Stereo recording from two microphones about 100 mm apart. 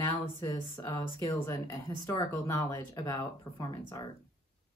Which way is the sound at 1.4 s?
30° left (ahead or behind).